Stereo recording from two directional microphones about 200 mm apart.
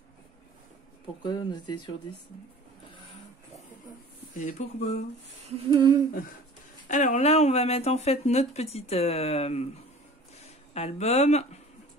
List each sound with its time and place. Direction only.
1.2 s speech: 20° left (ahead or behind)
4.3 s speech: 40° left (ahead or behind)
5.7 s humming: 20° right (ahead or behind)
6.9 s speech: 40° left (ahead or behind)
10.7 s speech: 30° left (ahead or behind)